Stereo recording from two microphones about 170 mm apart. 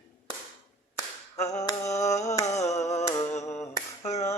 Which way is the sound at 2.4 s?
40° left (ahead or behind).